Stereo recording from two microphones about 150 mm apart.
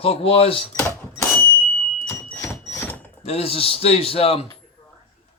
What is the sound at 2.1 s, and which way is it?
Fire alarm, 15° left (ahead or behind).